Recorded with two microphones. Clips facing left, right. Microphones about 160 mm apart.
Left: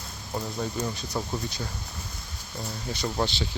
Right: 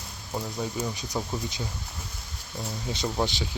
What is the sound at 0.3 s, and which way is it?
Speech, 5° right (ahead or behind).